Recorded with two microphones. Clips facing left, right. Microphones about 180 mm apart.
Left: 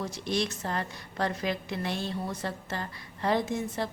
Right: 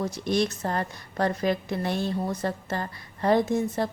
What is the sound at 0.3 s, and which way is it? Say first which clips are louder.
A woman's voice: right 5 dB; 45° right (ahead or behind).